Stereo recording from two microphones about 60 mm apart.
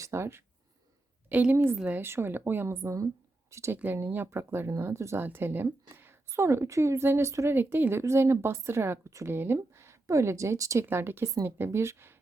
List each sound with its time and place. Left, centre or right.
0.0 s speech: right
1.3 s a woman's voice: right
2.0 s speech: right
2.8 s speech: right
3.5 s speech: right
3.8 s speech: right
5.2 s a woman's voice: right
7.5 s speech: right
9.3 s speech: right
10.8 s speech: right